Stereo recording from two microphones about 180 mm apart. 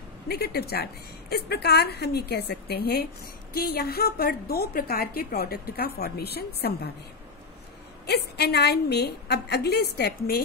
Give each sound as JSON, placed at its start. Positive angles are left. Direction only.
{"t": 0.3, "sound": "a woman's voice", "side_deg": 60}
{"t": 8.1, "sound": "a woman's voice", "side_deg": 65}